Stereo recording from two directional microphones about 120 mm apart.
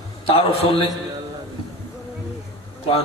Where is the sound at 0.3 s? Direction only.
50° left (ahead or behind).